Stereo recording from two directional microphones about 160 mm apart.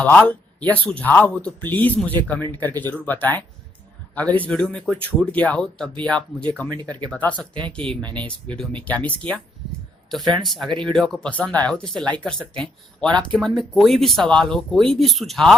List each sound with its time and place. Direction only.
0.0 s speech: 10° left (ahead or behind)
6.7 s speech: 25° right (ahead or behind)
7.1 s speech: 10° left (ahead or behind)
10.7 s speech: 30° right (ahead or behind)
10.9 s speech: 5° left (ahead or behind)